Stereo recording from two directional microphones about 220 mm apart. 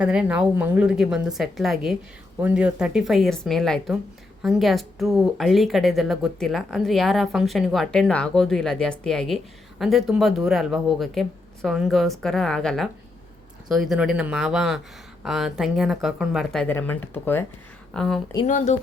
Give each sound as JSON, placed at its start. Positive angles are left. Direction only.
{"t": 0.0, "sound": "a woman's voice", "side_deg": -5}
{"t": 18.4, "sound": "speech", "side_deg": 35}